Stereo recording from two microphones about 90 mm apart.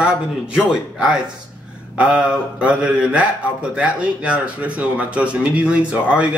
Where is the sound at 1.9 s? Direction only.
10° right (ahead or behind).